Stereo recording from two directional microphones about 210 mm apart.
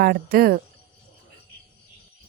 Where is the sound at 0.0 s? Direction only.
45° right (ahead or behind).